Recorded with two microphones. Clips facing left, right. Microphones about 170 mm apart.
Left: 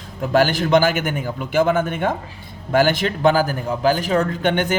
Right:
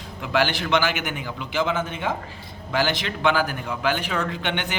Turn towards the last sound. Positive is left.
turn(degrees=45)  # may be behind; listen again after turning